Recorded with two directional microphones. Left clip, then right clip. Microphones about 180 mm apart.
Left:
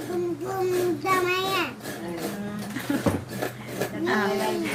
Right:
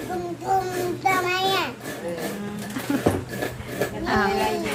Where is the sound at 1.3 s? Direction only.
10° right (ahead or behind).